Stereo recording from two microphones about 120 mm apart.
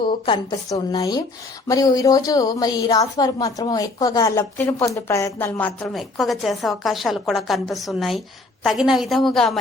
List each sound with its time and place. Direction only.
0.5 s a woman's voice: 30° left (ahead or behind)
4.4 s a woman's voice: 20° left (ahead or behind)
5.9 s a woman's voice: centre (ahead or behind)